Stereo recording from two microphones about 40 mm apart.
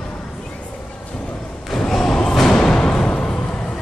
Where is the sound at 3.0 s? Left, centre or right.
Centre.